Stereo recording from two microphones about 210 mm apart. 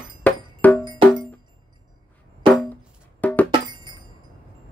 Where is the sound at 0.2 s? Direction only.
10° left (ahead or behind).